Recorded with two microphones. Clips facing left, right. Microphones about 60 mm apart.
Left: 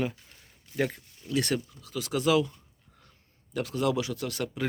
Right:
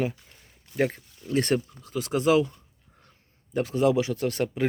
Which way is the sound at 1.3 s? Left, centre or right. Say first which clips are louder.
Right 4 dB; right.